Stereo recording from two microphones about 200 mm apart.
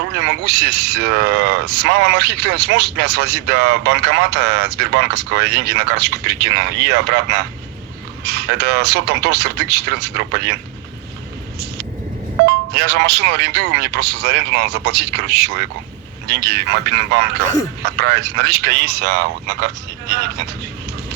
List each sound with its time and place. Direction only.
0.0 s speech: 55° right (ahead or behind)
12.5 s speech: 55° right (ahead or behind)